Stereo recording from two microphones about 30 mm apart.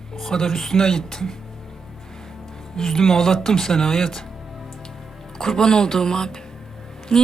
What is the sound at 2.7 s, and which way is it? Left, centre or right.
A woman's voice, centre.